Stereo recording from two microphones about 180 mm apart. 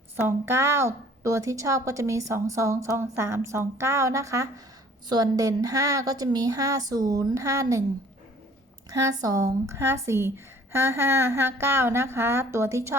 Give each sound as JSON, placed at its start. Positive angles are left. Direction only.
{"t": 0.2, "sound": "a woman's voice", "side_deg": -15}
{"t": 8.9, "sound": "a woman's voice", "side_deg": -20}